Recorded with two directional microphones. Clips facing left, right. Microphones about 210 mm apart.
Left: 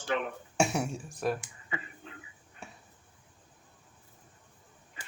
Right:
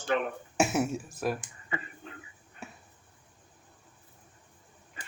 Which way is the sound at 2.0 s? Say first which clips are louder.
Right 2 dB; 45° right (ahead or behind).